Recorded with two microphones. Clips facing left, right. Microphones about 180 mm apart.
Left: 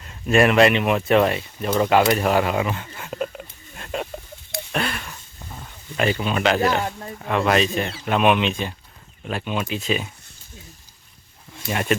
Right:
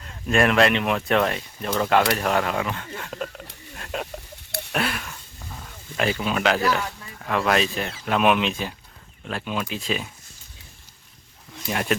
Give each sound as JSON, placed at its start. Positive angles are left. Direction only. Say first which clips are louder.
{"t": 0.3, "sound": "speech", "louder": "left 3 dB", "side_deg": 5}
{"t": 4.7, "sound": "a sound", "louder": "even", "side_deg": 0}
{"t": 6.0, "sound": "speech", "louder": "left 2 dB", "side_deg": 0}
{"t": 6.6, "sound": "speech", "louder": "left 3 dB", "side_deg": 45}
{"t": 7.3, "sound": "speech", "louder": "left 2 dB", "side_deg": 0}
{"t": 11.7, "sound": "speech", "louder": "left 2 dB", "side_deg": 0}